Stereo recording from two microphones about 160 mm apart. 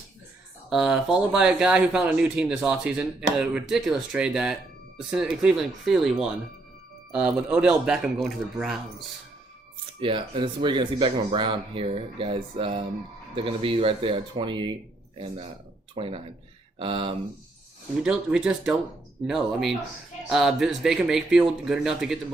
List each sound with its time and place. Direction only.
0.7 s speech: 5° right (ahead or behind)
10.0 s speech: 35° right (ahead or behind)
16.0 s speech: 35° right (ahead or behind)
18.0 s speech: 5° right (ahead or behind)